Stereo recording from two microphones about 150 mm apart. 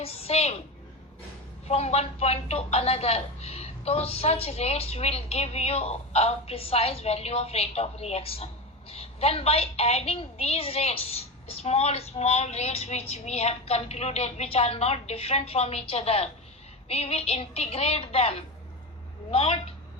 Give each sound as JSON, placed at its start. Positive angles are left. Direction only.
{"t": 0.0, "sound": "a woman's voice", "side_deg": 40}
{"t": 1.6, "sound": "a woman's voice", "side_deg": 45}